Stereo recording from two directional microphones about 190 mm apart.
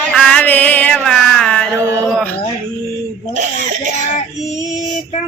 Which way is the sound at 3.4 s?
40° right (ahead or behind).